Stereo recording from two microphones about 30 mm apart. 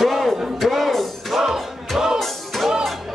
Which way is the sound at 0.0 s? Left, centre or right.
Centre.